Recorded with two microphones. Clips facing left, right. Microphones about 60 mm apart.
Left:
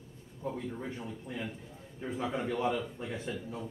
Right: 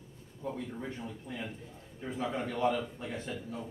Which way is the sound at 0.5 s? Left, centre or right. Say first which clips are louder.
Left 1 dB; centre.